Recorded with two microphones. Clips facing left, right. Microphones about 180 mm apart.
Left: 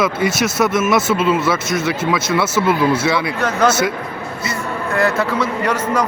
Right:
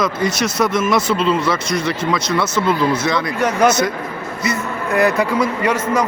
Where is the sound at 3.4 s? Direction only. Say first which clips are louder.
Right 4 dB; 10° right (ahead or behind).